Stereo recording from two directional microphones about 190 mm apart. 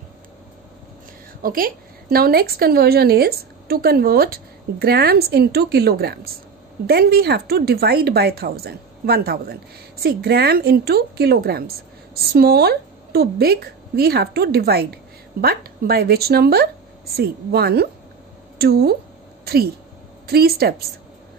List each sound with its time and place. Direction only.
1.4 s a woman's voice: 50° right (ahead or behind)